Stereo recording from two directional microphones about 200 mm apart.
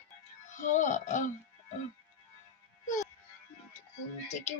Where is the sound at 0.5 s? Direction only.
40° left (ahead or behind).